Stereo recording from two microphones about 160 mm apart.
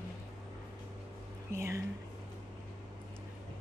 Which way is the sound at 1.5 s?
15° right (ahead or behind).